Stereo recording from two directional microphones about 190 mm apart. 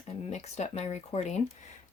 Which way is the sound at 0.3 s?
35° left (ahead or behind).